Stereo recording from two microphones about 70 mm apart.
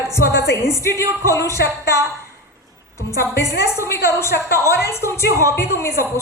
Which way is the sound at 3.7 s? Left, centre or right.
Left.